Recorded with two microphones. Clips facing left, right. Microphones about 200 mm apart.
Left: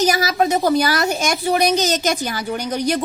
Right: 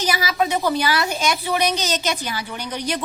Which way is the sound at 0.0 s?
45° left (ahead or behind).